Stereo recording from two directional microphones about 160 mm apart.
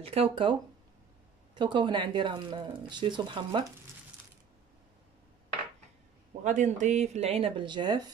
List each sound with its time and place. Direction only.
0.0 s speech: 35° right (ahead or behind)
6.4 s speech: 50° right (ahead or behind); by 8.1 s 25° right (ahead or behind)